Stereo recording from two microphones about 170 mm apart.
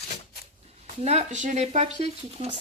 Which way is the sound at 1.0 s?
40° right (ahead or behind).